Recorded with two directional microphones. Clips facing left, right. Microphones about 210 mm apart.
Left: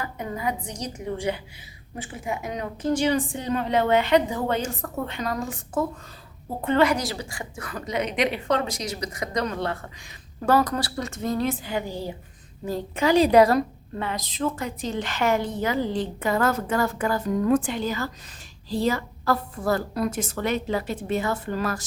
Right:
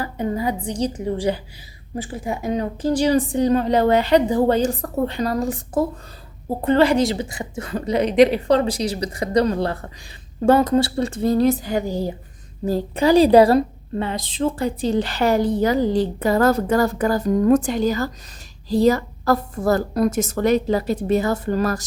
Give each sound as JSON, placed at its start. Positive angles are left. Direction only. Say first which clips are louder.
{"t": 0.0, "sound": "a woman's voice", "louder": "right 6 dB", "side_deg": -30}